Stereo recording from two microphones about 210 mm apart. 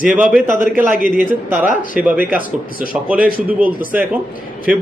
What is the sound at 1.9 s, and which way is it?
Speech, 5° right (ahead or behind).